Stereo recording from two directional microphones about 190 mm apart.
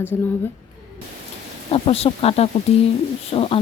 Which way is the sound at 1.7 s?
30° left (ahead or behind).